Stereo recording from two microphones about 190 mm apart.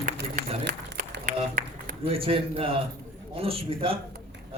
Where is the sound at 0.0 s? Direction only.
45° right (ahead or behind).